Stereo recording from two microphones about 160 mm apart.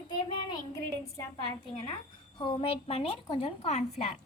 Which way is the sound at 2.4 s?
35° left (ahead or behind).